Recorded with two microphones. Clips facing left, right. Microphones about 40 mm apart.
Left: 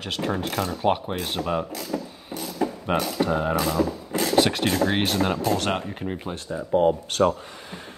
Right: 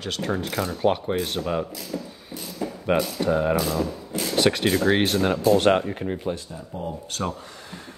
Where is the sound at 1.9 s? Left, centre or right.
Left.